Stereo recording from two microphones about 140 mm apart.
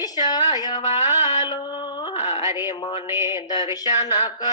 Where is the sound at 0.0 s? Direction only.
30° left (ahead or behind).